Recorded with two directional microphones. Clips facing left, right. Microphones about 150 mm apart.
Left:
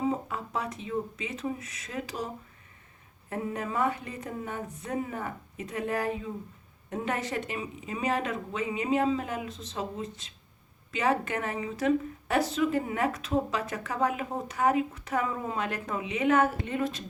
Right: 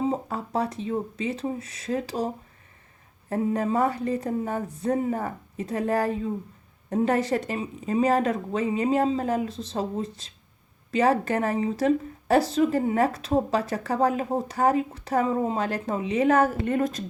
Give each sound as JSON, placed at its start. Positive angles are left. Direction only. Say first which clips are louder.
{"t": 0.0, "sound": "speech", "louder": "right 3 dB", "side_deg": -35}